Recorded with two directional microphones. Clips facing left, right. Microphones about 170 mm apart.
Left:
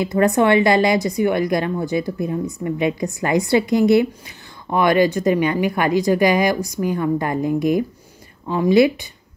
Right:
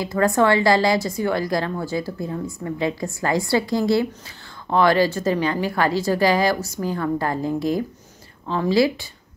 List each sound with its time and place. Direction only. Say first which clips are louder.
0.0 s a woman's voice: left 2 dB; 20° left (ahead or behind)